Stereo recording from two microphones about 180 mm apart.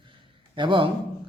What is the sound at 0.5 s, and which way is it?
Speech, 25° right (ahead or behind).